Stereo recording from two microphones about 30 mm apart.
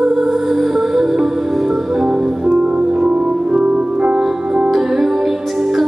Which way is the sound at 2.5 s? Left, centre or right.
Right.